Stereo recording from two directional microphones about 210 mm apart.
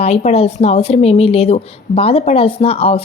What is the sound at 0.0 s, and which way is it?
A woman's voice, 30° left (ahead or behind).